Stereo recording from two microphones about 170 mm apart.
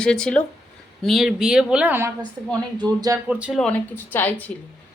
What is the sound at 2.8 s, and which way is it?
Speech, 25° right (ahead or behind).